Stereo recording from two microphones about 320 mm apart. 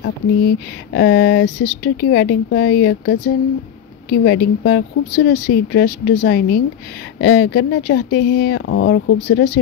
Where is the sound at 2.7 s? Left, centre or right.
Left.